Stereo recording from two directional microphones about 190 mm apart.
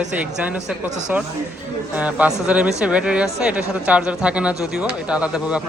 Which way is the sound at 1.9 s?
5° right (ahead or behind).